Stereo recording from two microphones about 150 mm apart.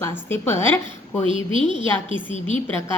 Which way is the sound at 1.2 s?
35° right (ahead or behind).